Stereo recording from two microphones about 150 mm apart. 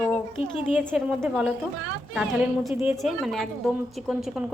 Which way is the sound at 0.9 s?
5° right (ahead or behind).